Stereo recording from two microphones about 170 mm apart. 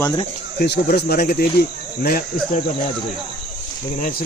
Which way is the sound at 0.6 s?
70° left (ahead or behind).